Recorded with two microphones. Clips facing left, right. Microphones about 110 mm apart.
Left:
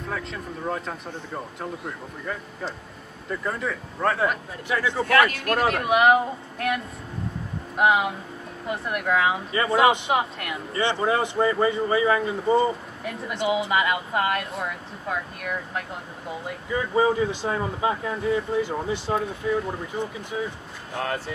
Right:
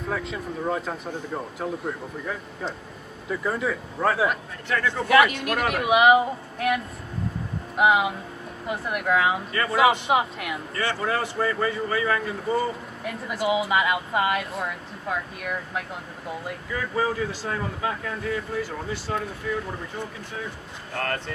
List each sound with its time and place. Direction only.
0.1 s speech: 5° right (ahead or behind)
4.6 s speech: 10° left (ahead or behind)
5.0 s a man's voice: 10° right (ahead or behind)
9.5 s speech: 20° left (ahead or behind)
9.8 s speech: centre (ahead or behind)
10.7 s speech: 25° left (ahead or behind)
13.0 s speech: centre (ahead or behind)
16.7 s speech: 20° left (ahead or behind)